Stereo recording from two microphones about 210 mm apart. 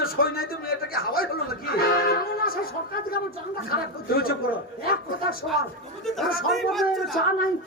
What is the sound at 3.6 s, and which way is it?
Speech, 45° left (ahead or behind).